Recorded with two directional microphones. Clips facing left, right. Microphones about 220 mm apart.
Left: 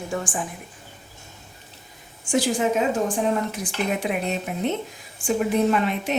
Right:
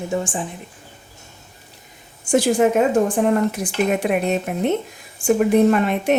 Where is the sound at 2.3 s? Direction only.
60° right (ahead or behind).